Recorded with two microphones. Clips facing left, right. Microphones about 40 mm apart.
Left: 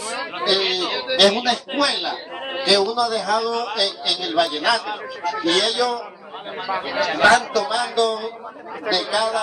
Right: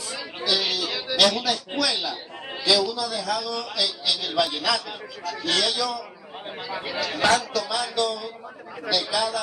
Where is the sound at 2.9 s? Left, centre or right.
Centre.